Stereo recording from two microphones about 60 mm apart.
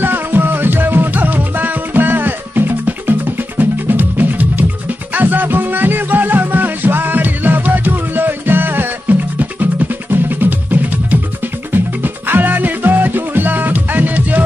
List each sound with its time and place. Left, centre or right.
0.0 s music: right